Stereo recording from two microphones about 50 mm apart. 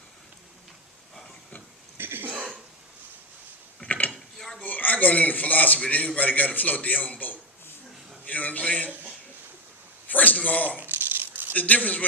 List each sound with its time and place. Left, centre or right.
2.0 s cough: right
3.8 s mechanisms: left
4.1 s mechanisms: centre
4.6 s a man's voice: left
8.2 s a sound: left
8.6 s a man's voice: left
10.1 s a sound: left
10.8 s a sound: right
11.5 s a man's voice: left